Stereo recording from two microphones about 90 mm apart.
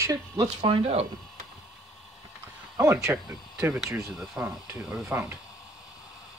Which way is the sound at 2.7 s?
35° right (ahead or behind).